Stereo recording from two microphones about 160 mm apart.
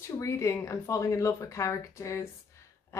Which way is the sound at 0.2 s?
20° left (ahead or behind).